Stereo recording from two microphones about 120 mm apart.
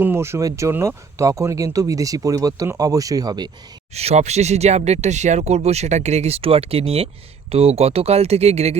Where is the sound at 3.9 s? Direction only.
65° right (ahead or behind).